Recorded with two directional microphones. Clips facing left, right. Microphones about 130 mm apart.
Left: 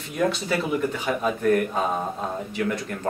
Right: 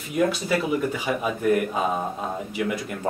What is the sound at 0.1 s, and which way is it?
Speech, 5° right (ahead or behind).